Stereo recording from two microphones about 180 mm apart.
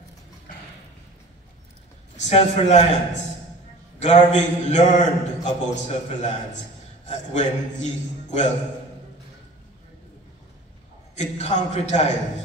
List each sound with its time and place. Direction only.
2.2 s a man's voice: 40° left (ahead or behind)
4.0 s a man's voice: 40° left (ahead or behind)
11.1 s a man's voice: 40° left (ahead or behind)